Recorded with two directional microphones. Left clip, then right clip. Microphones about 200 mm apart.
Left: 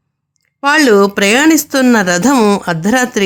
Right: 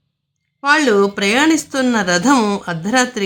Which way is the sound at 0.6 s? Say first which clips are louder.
Left 4 dB; 35° left (ahead or behind).